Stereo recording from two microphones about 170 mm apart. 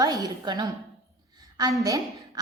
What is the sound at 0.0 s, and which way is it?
Speech, 20° right (ahead or behind).